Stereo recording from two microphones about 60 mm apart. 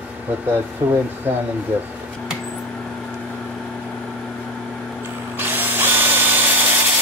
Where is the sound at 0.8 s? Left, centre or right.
Right.